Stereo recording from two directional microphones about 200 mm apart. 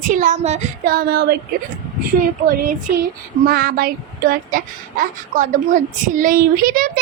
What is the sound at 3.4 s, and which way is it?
A woman's voice, 50° right (ahead or behind).